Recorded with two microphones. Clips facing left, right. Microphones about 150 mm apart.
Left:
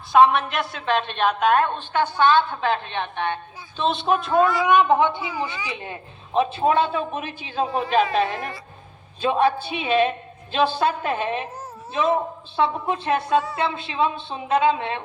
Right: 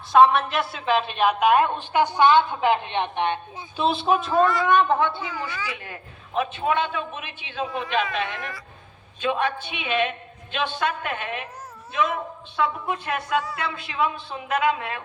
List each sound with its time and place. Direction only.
0.1 s a woman's voice: centre (ahead or behind); by 3.8 s 15° right (ahead or behind)
3.8 s speech: 5° right (ahead or behind)
4.6 s a woman's voice: 15° left (ahead or behind)